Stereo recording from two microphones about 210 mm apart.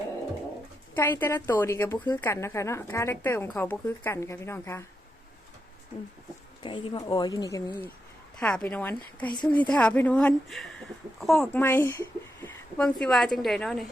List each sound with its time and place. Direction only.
0.9 s a woman's voice: 10° left (ahead or behind)
6.6 s speech: 25° left (ahead or behind)
8.4 s a woman's voice: 5° left (ahead or behind)